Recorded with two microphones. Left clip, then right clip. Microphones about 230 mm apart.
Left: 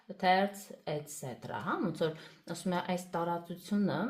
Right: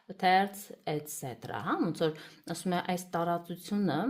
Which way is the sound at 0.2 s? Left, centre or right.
Right.